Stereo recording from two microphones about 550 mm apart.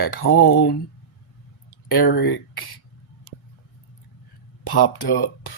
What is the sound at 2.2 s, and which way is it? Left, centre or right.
Speech, left.